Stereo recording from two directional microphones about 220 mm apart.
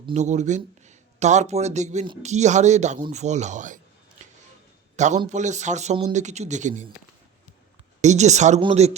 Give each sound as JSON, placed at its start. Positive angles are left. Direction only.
{"t": 0.0, "sound": "speech", "side_deg": -30}
{"t": 4.9, "sound": "a man's voice", "side_deg": -30}
{"t": 8.0, "sound": "speech", "side_deg": -30}